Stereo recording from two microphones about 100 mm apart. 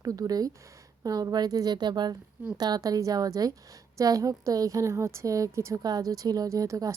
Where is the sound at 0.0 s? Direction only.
40° right (ahead or behind).